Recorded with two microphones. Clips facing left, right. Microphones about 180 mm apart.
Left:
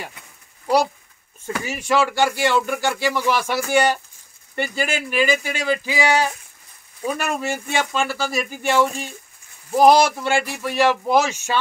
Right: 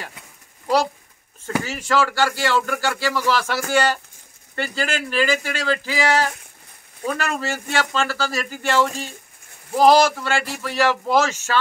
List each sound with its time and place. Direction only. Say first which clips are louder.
1.6 s speech: left 2 dB; 15° left (ahead or behind)